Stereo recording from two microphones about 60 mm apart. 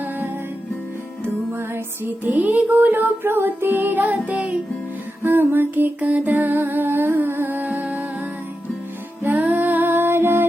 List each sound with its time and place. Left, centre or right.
2.2 s music: right
5.2 s music: right
6.0 s music: right
9.2 s music: right